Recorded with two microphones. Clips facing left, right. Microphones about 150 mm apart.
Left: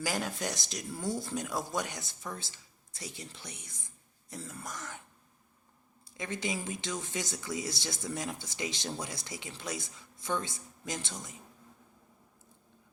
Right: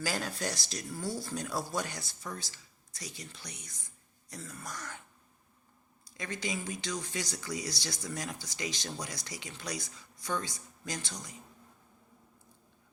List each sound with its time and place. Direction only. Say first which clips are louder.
0.0 s speech: left 1 dB; 20° left (ahead or behind)
6.1 s speech: left 2 dB; 25° left (ahead or behind)